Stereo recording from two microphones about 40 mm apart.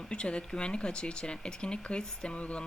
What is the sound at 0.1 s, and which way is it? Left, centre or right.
Speech, left.